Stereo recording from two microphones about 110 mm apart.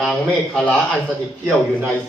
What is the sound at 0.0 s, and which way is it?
Speech, 5° left (ahead or behind).